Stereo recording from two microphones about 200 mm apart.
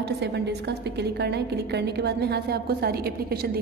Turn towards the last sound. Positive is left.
turn(degrees=-50)  # may be behind; listen again after turning